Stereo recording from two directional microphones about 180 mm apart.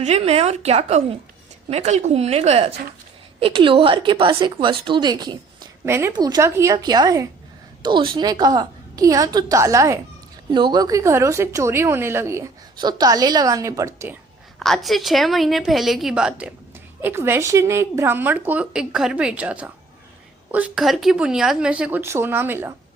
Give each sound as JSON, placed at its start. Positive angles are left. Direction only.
{"t": 0.0, "sound": "a woman's voice", "side_deg": -35}
{"t": 14.6, "sound": "a woman's voice", "side_deg": 0}